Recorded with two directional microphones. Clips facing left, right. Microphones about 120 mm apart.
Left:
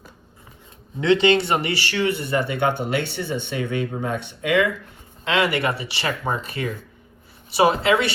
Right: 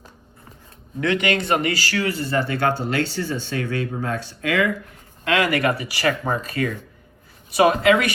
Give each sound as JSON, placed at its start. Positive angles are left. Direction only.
{"t": 1.0, "sound": "speech", "side_deg": 25}